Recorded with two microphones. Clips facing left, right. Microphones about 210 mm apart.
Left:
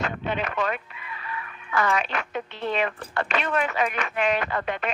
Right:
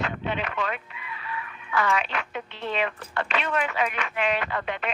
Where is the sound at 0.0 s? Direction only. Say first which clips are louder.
Left 1 dB; 45° left (ahead or behind).